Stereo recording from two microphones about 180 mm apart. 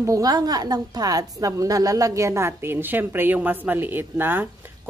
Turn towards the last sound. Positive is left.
turn(degrees=-10)  # may be behind; listen again after turning